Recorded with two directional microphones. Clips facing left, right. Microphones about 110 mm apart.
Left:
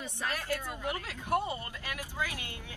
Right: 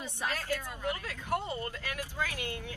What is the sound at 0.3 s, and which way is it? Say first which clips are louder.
Speech: left 1 dB; 15° left (ahead or behind).